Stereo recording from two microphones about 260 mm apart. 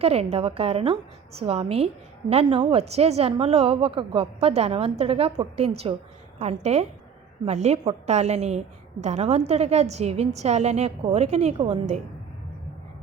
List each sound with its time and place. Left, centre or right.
0.0 s a woman's voice: right